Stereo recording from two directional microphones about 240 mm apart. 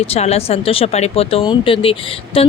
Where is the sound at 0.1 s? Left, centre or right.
Left.